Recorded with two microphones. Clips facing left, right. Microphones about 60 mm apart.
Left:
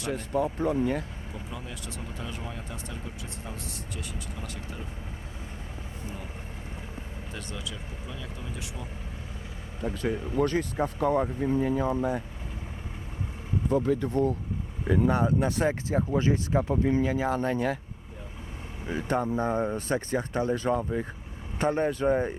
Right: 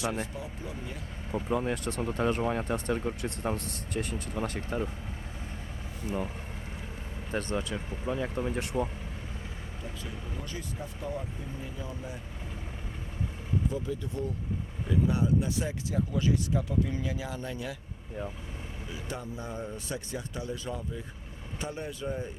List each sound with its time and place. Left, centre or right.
0.0 s speech: right
0.3 s speech: left
1.3 s speech: right
7.3 s speech: right
9.8 s speech: left
13.7 s speech: left
18.9 s speech: left